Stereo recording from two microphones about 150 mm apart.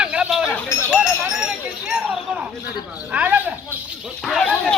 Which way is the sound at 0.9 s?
5° right (ahead or behind).